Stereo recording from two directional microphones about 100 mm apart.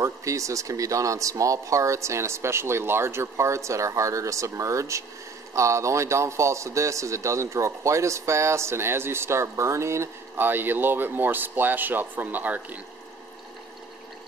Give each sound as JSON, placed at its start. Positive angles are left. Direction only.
{"t": 0.0, "sound": "a man's voice", "side_deg": -30}